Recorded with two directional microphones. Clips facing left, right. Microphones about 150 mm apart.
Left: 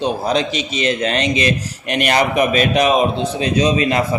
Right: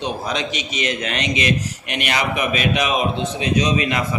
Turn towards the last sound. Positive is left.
turn(degrees=35)  # may be behind; listen again after turning